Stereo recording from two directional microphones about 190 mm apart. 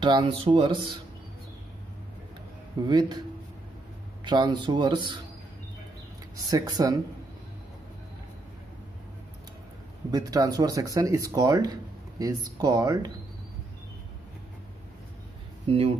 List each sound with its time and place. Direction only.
0.0 s speech: 25° right (ahead or behind)
2.9 s speech: 20° right (ahead or behind)
4.2 s speech: 25° right (ahead or behind)
6.4 s speech: 20° right (ahead or behind)
10.1 s speech: 20° right (ahead or behind)
15.7 s speech: 30° right (ahead or behind)